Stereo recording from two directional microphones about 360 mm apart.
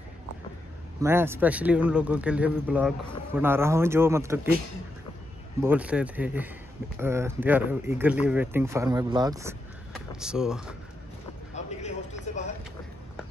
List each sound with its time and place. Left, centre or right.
1.0 s speech: centre
5.6 s speech: centre
11.5 s a sound: centre